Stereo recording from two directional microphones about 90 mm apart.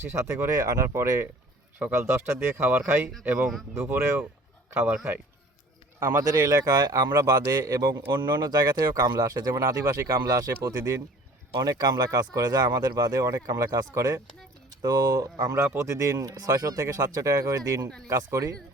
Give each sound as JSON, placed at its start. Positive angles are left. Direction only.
{"t": 0.0, "sound": "speech", "side_deg": -30}
{"t": 6.0, "sound": "speech", "side_deg": -30}